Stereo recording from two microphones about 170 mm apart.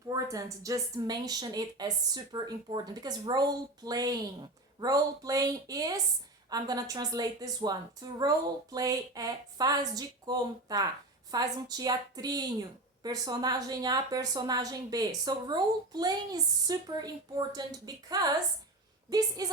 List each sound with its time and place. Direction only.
0.1 s a woman's voice: 20° right (ahead or behind)
19.4 s a woman's voice: 20° right (ahead or behind)